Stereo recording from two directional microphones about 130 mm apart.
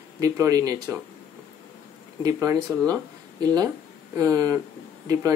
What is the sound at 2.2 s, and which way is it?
Speech, 25° right (ahead or behind).